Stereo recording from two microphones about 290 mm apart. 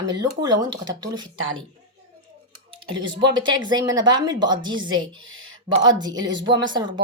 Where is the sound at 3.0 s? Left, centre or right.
Centre.